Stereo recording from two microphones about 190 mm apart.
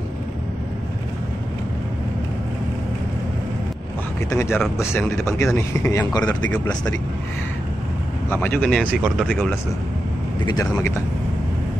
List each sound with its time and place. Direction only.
4.3 s speech: 15° left (ahead or behind)
8.3 s speech: 10° left (ahead or behind)
8.8 s speech: 5° right (ahead or behind)
10.4 s speech: 20° left (ahead or behind)